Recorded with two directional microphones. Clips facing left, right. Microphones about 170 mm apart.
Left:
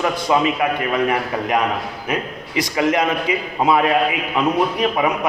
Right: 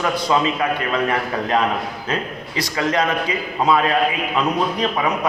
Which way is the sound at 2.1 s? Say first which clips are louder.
Left 3 dB; 20° left (ahead or behind).